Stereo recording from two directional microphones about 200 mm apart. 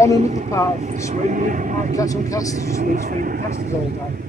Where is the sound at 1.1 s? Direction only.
40° right (ahead or behind).